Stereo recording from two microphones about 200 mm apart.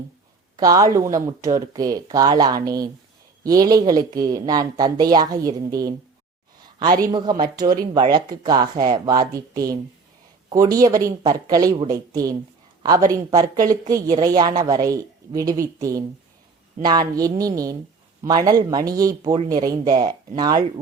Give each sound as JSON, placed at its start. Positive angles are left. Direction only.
{"t": 0.5, "sound": "a woman's voice", "side_deg": -20}